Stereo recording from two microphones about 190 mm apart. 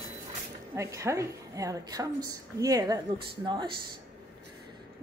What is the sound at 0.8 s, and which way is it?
A woman's voice, 15° right (ahead or behind).